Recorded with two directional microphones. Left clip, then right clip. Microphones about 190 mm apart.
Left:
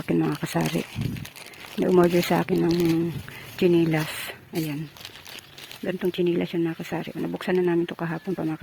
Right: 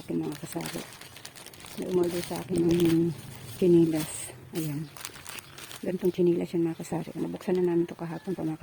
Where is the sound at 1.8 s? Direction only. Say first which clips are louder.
Left 8 dB; 25° left (ahead or behind).